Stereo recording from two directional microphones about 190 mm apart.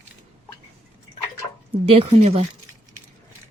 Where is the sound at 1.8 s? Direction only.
30° right (ahead or behind).